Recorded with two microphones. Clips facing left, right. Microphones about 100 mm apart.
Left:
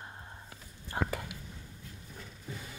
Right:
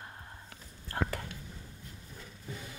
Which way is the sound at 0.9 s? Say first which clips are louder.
Even; 15° left (ahead or behind).